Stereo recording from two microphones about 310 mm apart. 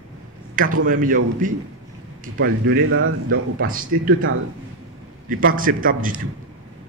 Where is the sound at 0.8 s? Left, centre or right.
Right.